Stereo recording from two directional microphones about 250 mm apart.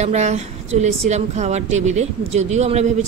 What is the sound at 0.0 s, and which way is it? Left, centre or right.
Speech, right.